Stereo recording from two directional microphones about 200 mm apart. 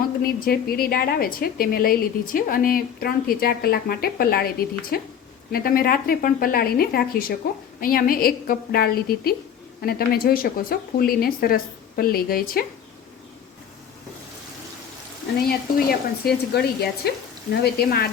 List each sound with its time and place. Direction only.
0.2 s a woman's voice: 50° left (ahead or behind)
15.4 s a woman's voice: 50° left (ahead or behind)